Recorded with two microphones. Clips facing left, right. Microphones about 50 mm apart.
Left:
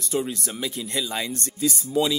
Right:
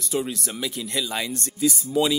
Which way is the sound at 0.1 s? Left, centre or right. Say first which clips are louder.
Even; centre.